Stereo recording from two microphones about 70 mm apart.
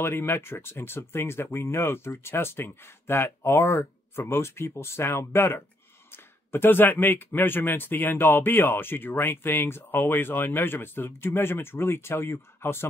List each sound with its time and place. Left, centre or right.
0.0 s speech: left